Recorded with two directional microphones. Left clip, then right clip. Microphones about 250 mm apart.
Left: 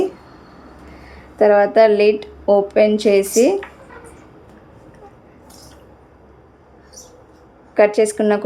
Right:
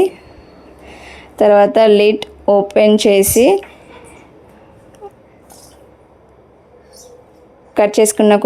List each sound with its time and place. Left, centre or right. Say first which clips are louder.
0.9 s speech: right 2 dB; right
7.7 s speech: right 2 dB; right